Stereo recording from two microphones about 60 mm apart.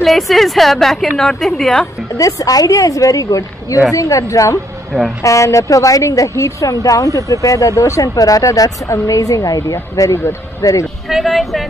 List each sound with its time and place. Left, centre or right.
0.0 s a woman's voice: centre
2.1 s a woman's voice: left
11.1 s a woman's voice: centre